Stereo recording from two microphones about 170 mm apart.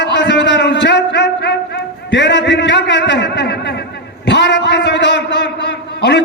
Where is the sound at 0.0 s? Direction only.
90° left.